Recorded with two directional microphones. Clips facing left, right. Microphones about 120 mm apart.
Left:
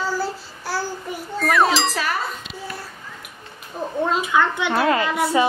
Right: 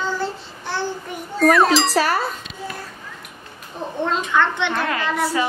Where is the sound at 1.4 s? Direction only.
Centre (ahead or behind).